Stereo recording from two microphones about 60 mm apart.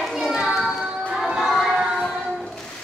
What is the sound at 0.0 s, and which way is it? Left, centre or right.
Children playing, centre.